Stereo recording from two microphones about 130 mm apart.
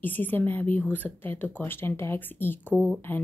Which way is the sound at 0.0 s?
15° left (ahead or behind).